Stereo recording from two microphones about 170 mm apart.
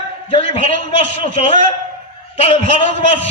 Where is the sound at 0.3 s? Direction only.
35° left (ahead or behind).